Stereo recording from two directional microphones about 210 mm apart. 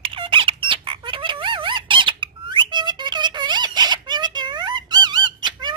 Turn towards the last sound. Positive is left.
turn(degrees=-20)  # may be behind; listen again after turning